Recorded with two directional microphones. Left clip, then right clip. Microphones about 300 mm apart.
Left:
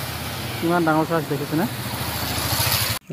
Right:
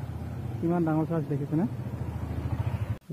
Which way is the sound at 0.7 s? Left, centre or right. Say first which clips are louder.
Left 9 dB; centre.